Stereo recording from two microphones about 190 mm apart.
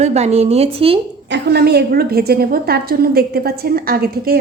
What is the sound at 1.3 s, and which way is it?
A woman's voice, 60° right (ahead or behind).